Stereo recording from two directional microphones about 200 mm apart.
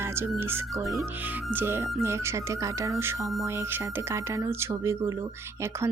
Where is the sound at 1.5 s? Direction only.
10° right (ahead or behind).